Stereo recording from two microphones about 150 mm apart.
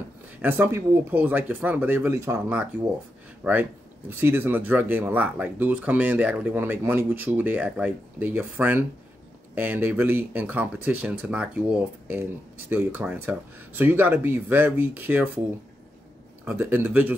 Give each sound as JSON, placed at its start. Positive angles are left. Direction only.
{"t": 0.4, "sound": "speech", "side_deg": -15}
{"t": 16.4, "sound": "speech", "side_deg": -10}